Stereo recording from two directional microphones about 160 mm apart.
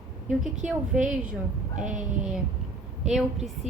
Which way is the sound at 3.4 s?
45° right (ahead or behind).